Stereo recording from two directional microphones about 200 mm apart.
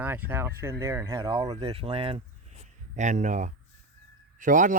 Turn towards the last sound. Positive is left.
turn(degrees=-40)  # may be behind; listen again after turning